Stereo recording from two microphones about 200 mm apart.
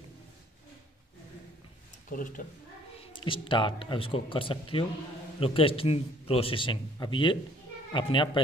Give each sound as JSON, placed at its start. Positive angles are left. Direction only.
{"t": 2.0, "sound": "speech", "side_deg": 45}
{"t": 3.0, "sound": "a man's voice", "side_deg": 25}